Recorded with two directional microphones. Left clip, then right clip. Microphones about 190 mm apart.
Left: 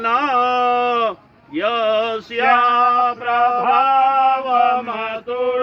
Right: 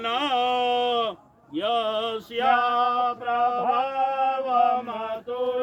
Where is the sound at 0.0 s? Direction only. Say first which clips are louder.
Left 7 dB; 20° right (ahead or behind).